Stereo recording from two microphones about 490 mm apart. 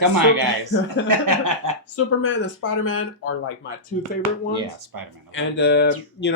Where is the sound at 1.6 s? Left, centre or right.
Right.